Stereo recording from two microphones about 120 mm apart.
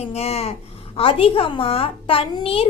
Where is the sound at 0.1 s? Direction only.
60° left (ahead or behind).